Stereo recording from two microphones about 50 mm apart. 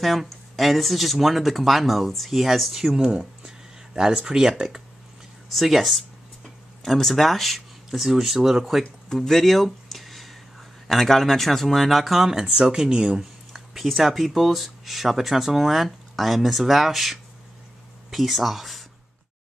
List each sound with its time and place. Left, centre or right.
0.0 s speech: centre
3.0 s a sound: centre
4.1 s speech: centre
9.1 s a sound: centre
10.9 s speech: centre
13.2 s speech: centre